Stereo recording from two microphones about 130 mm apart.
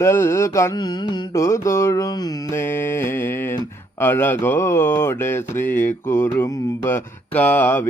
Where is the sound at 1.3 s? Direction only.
20° left (ahead or behind).